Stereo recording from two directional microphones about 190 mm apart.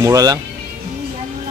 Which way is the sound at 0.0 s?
20° right (ahead or behind).